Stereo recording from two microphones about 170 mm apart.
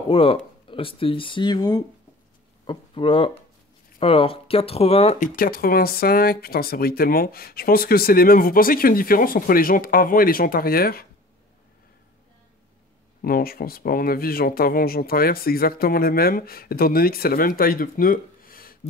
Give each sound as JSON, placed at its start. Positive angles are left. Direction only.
{"t": 0.1, "sound": "speech", "side_deg": 30}
{"t": 5.3, "sound": "speech", "side_deg": 60}
{"t": 13.2, "sound": "speech", "side_deg": 60}